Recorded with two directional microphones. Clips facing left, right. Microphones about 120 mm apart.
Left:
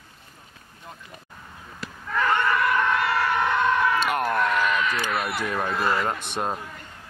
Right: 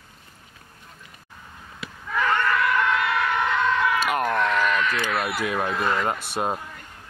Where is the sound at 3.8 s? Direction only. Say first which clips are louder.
Even; centre (ahead or behind).